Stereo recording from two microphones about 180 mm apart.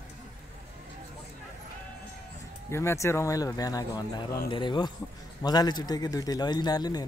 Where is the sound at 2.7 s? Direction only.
15° left (ahead or behind).